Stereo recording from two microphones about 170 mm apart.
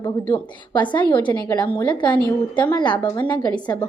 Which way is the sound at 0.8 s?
30° left (ahead or behind).